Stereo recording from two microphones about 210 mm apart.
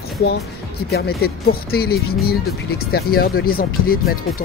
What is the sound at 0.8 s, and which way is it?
Speech, 50° left (ahead or behind).